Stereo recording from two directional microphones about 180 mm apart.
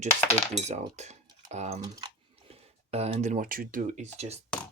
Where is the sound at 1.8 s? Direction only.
25° right (ahead or behind).